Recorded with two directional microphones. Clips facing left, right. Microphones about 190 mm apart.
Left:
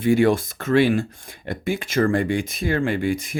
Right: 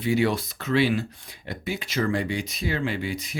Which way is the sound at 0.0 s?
50° left (ahead or behind).